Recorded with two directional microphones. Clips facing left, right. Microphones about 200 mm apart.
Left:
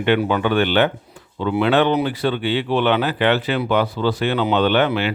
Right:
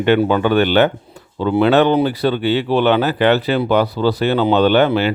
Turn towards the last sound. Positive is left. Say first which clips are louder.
# right 4 dB
turn(degrees=-35)  # may be behind; listen again after turning